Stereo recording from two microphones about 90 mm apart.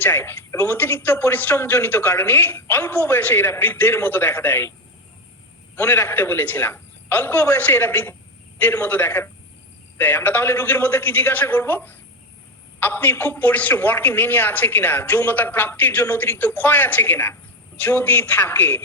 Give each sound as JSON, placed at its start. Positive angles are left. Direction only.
{"t": 0.0, "sound": "speech", "side_deg": 20}
{"t": 5.7, "sound": "a woman's voice", "side_deg": 25}